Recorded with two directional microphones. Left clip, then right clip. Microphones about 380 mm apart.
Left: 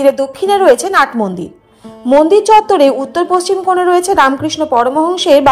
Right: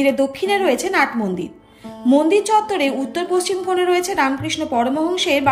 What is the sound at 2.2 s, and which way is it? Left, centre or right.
A woman's voice, centre.